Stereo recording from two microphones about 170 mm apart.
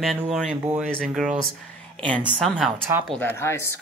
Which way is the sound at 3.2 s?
15° left (ahead or behind).